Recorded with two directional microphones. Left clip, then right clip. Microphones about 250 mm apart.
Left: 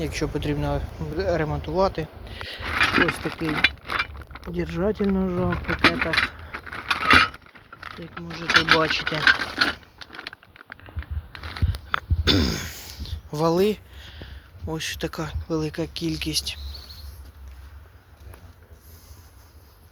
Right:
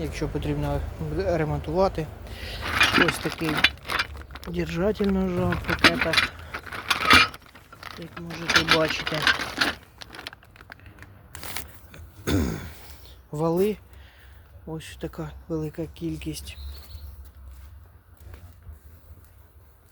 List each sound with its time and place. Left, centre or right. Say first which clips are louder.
0.0 s speech: left 3 dB; centre
1.1 s speech: left 1 dB; centre
4.5 s speech: even; centre
5.5 s speech: right 1 dB; centre
6.5 s mechanisms: even; centre
8.0 s speech: left 1 dB; centre
11.3 s a sound: left 2 dB; right
12.2 s throat clearing: left 4 dB; centre